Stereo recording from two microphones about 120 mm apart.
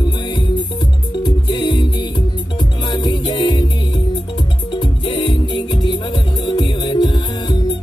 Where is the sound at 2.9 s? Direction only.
40° left (ahead or behind).